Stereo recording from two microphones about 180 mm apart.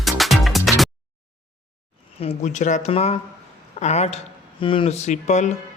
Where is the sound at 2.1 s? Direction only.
35° left (ahead or behind).